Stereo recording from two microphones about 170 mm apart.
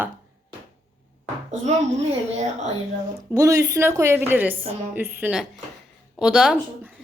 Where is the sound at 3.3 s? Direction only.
20° right (ahead or behind); by 6.6 s 5° right (ahead or behind).